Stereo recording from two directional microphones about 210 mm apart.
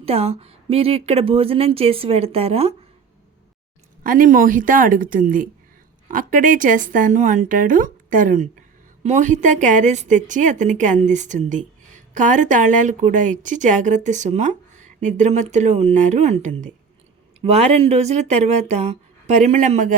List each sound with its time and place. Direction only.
0.0 s a woman's voice: 30° right (ahead or behind)
4.0 s a woman's voice: 40° right (ahead or behind)